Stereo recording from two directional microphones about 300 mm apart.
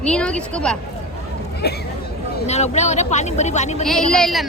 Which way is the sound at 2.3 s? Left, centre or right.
Left.